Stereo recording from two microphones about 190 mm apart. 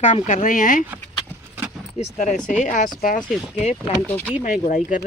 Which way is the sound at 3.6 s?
35° left (ahead or behind).